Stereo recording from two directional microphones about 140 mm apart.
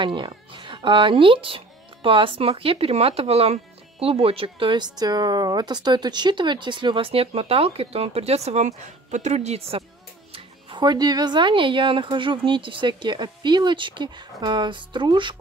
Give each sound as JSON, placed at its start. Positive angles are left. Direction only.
{"t": 0.0, "sound": "speech", "side_deg": -35}
{"t": 10.3, "sound": "speech", "side_deg": -35}